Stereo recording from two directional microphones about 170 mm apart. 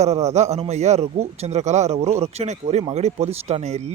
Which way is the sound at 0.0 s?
40° right (ahead or behind).